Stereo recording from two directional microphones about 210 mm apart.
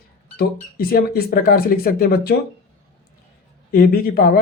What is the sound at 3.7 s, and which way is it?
Speech, 45° left (ahead or behind).